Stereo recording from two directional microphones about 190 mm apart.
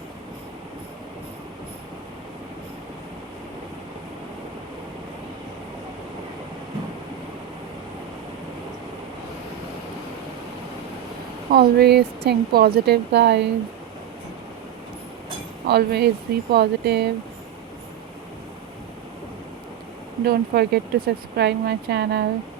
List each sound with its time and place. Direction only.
11.5 s speech: 55° right (ahead or behind)
15.6 s speech: 60° right (ahead or behind)
20.2 s speech: 60° right (ahead or behind)